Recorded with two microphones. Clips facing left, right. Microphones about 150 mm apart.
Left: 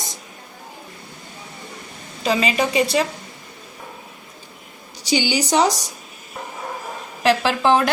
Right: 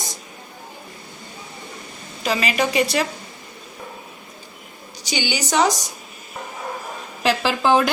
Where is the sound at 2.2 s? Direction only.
25° left (ahead or behind).